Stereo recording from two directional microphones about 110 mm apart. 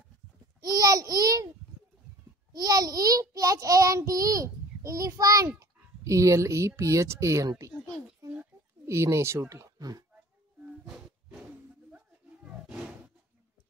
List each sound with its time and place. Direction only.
0.6 s babbling: 35° right (ahead or behind)
2.5 s child singing: 35° right (ahead or behind)
5.6 s a sound: 30° right (ahead or behind)
6.8 s speech: 25° right (ahead or behind)
8.8 s speech: 25° right (ahead or behind)
12.6 s roaring cats: 10° right (ahead or behind)